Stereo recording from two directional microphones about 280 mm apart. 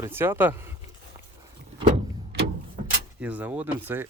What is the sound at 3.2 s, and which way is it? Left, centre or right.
Speech, centre.